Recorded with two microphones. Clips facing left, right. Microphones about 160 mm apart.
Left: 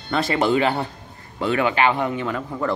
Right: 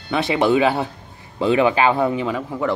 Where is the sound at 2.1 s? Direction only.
15° right (ahead or behind).